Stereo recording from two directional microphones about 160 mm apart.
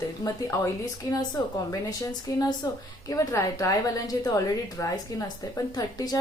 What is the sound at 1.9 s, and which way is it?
A woman's voice, 25° left (ahead or behind).